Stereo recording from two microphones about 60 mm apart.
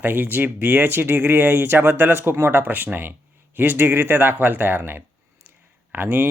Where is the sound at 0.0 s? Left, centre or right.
Right.